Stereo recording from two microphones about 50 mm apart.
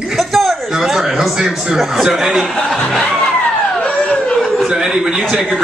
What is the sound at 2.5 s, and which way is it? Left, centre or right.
Speech, centre.